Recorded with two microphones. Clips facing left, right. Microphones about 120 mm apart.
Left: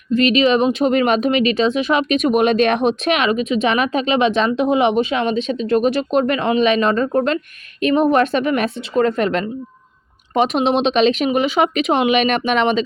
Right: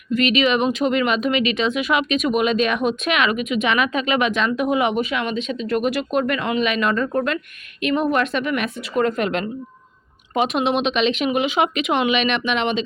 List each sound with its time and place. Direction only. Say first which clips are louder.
0.1 s speech: left 4 dB; 35° left (ahead or behind)
2.1 s speech: left 5 dB; 50° left (ahead or behind)
2.7 s speech: left 3 dB; 35° left (ahead or behind)